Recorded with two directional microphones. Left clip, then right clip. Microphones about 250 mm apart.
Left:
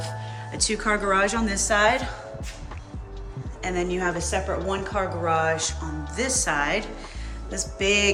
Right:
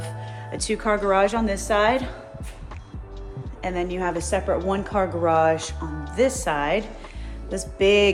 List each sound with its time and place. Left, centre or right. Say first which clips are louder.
0.5 s speech: right 1 dB; right
3.6 s speech: even; centre